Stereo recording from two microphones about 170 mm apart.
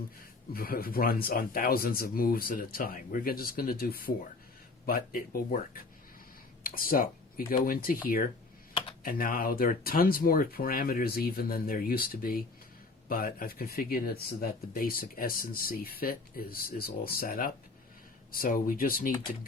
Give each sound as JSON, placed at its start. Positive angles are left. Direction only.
{"t": 0.5, "sound": "speech", "side_deg": 60}